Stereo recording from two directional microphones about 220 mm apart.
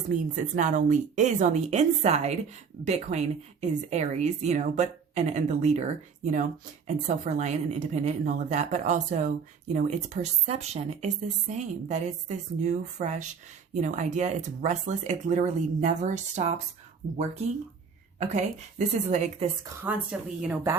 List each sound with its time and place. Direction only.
0.1 s a woman's voice: 35° right (ahead or behind)
18.2 s a woman's voice: 30° right (ahead or behind)
19.6 s a woman's voice: 10° right (ahead or behind)